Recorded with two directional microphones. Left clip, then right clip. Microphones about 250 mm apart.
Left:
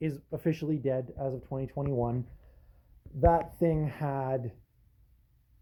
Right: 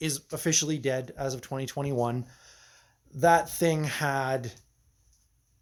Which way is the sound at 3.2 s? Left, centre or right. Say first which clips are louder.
Right 3 dB; centre.